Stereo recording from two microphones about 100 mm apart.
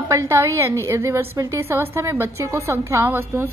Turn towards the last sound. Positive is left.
turn(degrees=-20)  # may be behind; listen again after turning